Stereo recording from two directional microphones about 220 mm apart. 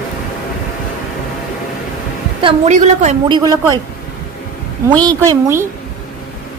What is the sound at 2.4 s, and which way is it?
Speech, 30° right (ahead or behind).